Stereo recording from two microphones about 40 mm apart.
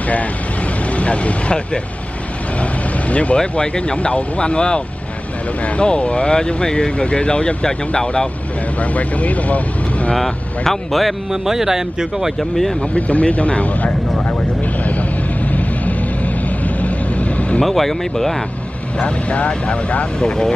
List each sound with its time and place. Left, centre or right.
0.8 s speech: left
3.3 s speech: left
8.7 s speech: left
10.1 s speech: centre
11.4 s speech: centre
12.4 s speech: centre
12.9 s speech: left
14.2 s vehicle: left
17.6 s speech: centre
18.9 s speech: left
20.2 s speech: centre